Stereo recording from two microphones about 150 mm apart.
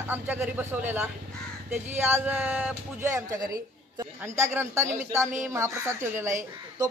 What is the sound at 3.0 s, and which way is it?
A woman's voice, 20° right (ahead or behind).